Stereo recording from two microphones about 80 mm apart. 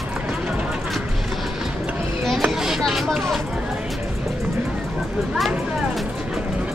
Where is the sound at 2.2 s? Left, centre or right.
Centre.